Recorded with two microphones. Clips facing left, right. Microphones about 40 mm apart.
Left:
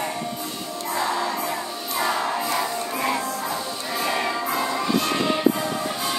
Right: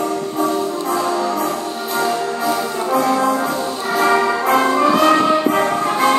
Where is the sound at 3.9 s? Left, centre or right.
Right.